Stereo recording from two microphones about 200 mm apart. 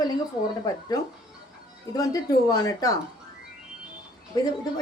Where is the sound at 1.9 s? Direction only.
20° left (ahead or behind).